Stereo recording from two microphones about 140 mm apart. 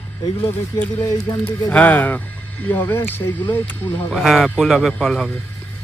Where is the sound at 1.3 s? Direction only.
25° left (ahead or behind).